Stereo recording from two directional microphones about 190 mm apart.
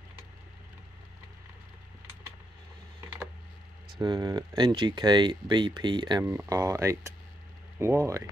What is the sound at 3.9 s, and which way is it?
Speech, 20° right (ahead or behind).